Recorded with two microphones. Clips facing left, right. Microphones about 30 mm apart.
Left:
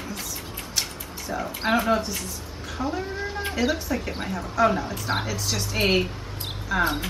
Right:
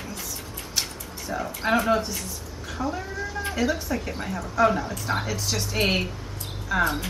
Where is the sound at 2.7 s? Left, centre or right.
Left.